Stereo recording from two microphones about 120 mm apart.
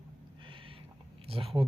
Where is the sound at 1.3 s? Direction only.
55° right (ahead or behind).